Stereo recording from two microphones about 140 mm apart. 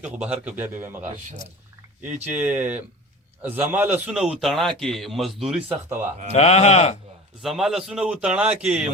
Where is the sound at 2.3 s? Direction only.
10° right (ahead or behind).